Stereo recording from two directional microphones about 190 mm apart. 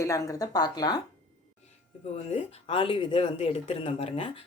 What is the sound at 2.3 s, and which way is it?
Speech, 30° left (ahead or behind).